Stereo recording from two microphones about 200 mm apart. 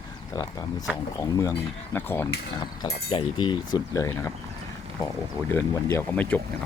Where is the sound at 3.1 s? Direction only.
25° left (ahead or behind).